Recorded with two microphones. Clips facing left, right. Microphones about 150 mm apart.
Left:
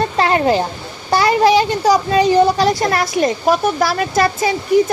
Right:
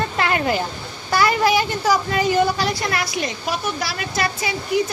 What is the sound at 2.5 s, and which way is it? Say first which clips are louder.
Speech: left 7 dB; 40° left (ahead or behind).